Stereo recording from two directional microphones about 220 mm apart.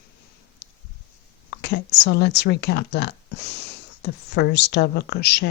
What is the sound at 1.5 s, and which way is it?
Speech, 50° left (ahead or behind).